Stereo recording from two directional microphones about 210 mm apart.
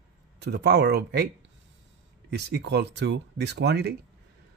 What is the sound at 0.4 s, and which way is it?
Speech, 55° right (ahead or behind).